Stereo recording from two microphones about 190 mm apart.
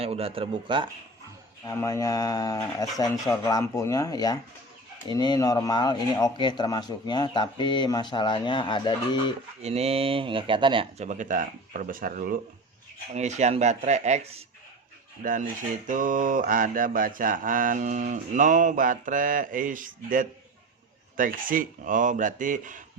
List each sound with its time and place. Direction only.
0.0 s speech: 30° right (ahead or behind)
1.6 s speech: 15° left (ahead or behind)
9.6 s speech: 35° right (ahead or behind)
15.2 s mantra: 45° right (ahead or behind)